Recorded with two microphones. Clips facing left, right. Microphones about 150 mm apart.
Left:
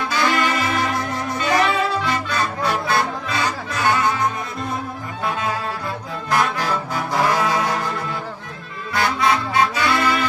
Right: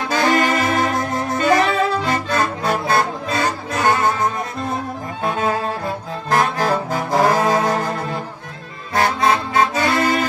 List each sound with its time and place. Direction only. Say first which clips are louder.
0.1 s saxophone: right 5 dB; 45° right (ahead or behind)
2.0 s music: right 3 dB; 45° right (ahead or behind)
5.2 s music: right 4 dB; 45° right (ahead or behind)
8.9 s music: right 2 dB; 45° right (ahead or behind)